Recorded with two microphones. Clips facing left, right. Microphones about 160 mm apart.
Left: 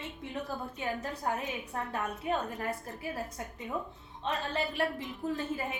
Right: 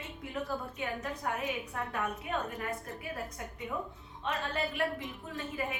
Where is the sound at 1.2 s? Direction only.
30° left (ahead or behind).